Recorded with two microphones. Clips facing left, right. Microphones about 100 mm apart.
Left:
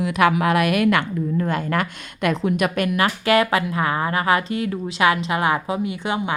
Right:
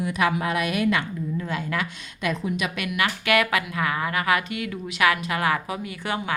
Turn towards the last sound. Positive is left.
turn(degrees=20)  # may be behind; listen again after turning